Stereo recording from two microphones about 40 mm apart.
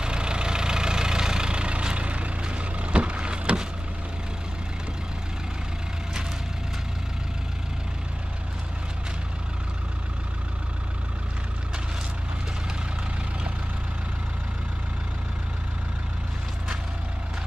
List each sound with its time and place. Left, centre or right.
0.0 s vehicle: right